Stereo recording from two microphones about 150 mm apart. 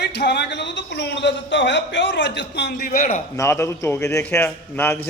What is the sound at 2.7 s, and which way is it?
Speech, 90° left.